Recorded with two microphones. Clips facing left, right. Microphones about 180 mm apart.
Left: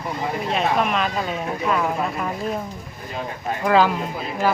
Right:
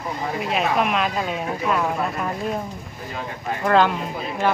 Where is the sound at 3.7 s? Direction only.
5° left (ahead or behind).